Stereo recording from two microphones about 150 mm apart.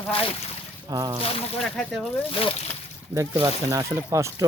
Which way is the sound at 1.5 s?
Centre (ahead or behind).